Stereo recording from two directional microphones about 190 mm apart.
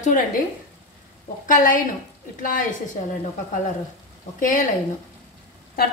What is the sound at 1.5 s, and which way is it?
Speech, 45° left (ahead or behind).